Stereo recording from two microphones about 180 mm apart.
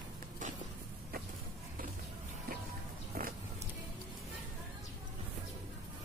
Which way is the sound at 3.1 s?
55° right (ahead or behind).